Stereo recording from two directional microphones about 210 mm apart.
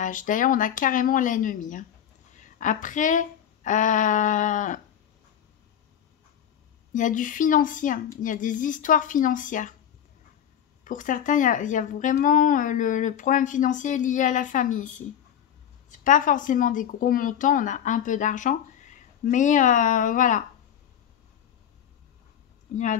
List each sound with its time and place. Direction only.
0.0 s speech: 40° left (ahead or behind)
6.9 s speech: 35° left (ahead or behind)
10.8 s speech: 40° left (ahead or behind)
16.0 s speech: 40° left (ahead or behind)